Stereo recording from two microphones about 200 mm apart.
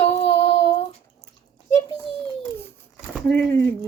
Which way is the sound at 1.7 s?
20° left (ahead or behind).